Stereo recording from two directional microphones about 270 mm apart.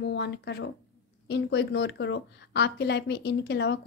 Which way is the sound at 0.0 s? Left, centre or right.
Left.